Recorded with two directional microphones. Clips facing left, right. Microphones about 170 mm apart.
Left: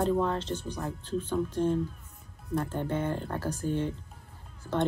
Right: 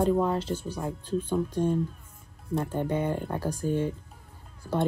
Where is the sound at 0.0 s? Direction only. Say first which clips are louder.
Right 3 dB; 10° right (ahead or behind).